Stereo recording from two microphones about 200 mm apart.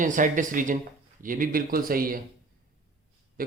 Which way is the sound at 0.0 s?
40° right (ahead or behind).